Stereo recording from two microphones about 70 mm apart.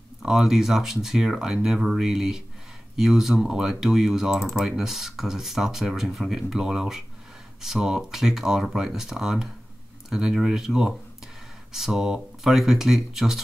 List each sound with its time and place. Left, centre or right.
0.2 s speech: centre